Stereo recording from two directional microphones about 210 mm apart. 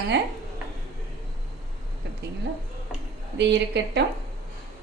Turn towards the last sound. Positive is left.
turn(degrees=-55)  # may be behind; listen again after turning